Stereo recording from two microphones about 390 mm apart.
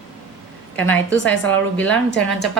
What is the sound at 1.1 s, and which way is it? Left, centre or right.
Speech, left.